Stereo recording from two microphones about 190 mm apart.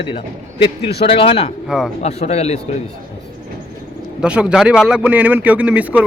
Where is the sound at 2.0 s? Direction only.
35° left (ahead or behind).